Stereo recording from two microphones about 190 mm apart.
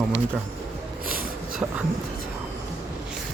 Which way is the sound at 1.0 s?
50° right (ahead or behind).